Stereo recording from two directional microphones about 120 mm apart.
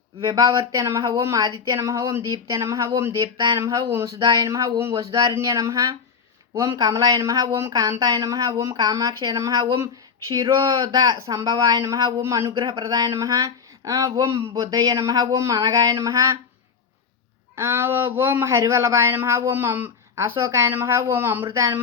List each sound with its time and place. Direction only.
0.2 s speech: 30° right (ahead or behind)
12.5 s speech: 35° right (ahead or behind)
17.5 s speech: 20° right (ahead or behind)